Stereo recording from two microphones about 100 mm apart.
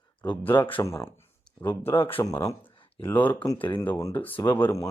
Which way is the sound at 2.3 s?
35° left (ahead or behind).